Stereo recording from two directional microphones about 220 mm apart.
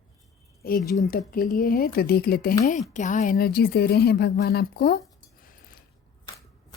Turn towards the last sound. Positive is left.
turn(degrees=45)  # may be behind; listen again after turning